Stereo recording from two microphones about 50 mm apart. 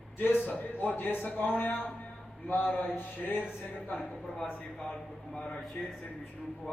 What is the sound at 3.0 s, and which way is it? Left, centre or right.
Music, left.